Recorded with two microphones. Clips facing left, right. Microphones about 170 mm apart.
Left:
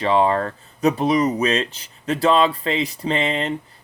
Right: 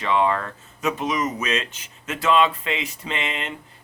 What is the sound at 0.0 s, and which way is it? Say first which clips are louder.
A man's voice: left 4 dB; 35° left (ahead or behind).